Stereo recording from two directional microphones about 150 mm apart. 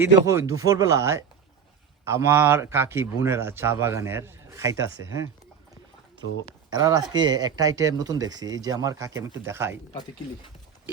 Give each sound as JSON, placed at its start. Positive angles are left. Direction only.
{"t": 0.3, "sound": "a man's voice", "side_deg": -20}
{"t": 6.4, "sound": "a man's voice", "side_deg": -25}
{"t": 9.9, "sound": "speech", "side_deg": 30}